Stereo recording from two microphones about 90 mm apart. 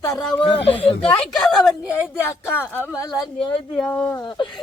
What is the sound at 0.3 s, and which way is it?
Speech, 90° left.